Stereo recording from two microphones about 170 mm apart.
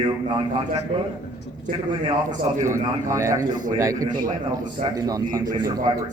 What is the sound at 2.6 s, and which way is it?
A man's voice, 15° right (ahead or behind).